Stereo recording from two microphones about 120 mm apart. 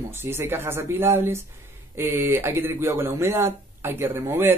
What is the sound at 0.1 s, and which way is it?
Speech, 20° right (ahead or behind).